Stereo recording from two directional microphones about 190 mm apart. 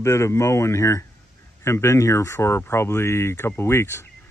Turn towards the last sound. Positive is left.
turn(degrees=15)  # may be behind; listen again after turning